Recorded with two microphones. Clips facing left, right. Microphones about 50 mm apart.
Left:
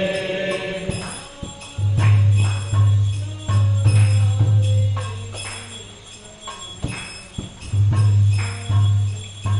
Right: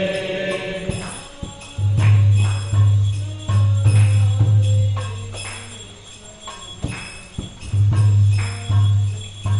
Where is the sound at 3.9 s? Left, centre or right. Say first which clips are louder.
Right 1 dB; centre.